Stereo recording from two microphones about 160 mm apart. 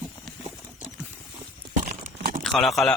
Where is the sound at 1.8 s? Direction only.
50° right (ahead or behind).